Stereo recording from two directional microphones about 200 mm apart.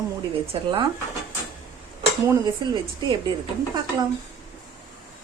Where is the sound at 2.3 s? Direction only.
20° right (ahead or behind).